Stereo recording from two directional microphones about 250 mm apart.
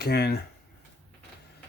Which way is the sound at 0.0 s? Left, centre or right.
Left.